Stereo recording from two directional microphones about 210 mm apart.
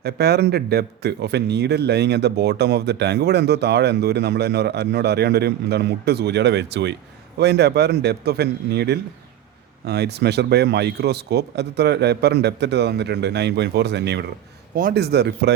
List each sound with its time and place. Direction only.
0.0 s speech: 50° right (ahead or behind)